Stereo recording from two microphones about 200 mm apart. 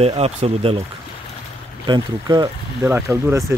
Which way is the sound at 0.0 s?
30° right (ahead or behind).